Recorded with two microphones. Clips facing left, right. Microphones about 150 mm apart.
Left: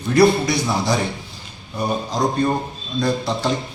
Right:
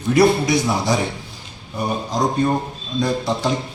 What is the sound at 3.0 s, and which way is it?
Speech, 15° right (ahead or behind).